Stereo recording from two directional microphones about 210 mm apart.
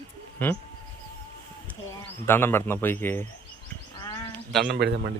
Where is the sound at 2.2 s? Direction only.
10° left (ahead or behind).